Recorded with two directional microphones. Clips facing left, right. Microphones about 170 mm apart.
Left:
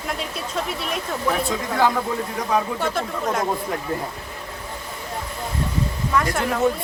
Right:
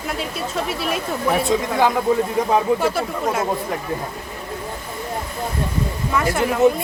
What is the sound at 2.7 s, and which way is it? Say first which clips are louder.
Speech: right 3 dB; 5° right (ahead or behind).